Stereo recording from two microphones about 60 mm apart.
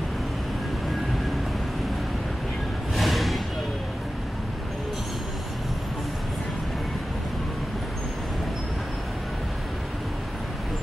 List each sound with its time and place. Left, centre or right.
2.9 s music: centre